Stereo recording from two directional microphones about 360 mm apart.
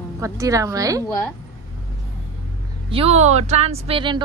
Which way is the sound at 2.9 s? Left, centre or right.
Centre.